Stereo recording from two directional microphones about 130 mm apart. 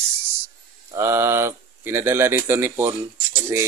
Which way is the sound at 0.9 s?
20° right (ahead or behind).